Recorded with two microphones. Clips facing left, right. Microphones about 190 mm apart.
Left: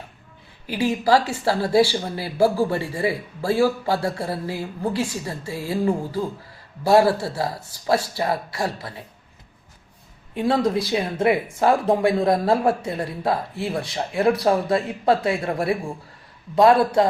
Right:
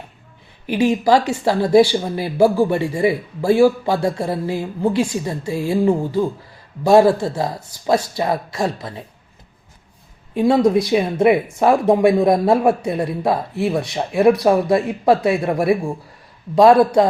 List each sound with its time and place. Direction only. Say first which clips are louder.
0.7 s speech: right 4 dB; 20° right (ahead or behind)
10.3 s speech: right 6 dB; 15° right (ahead or behind)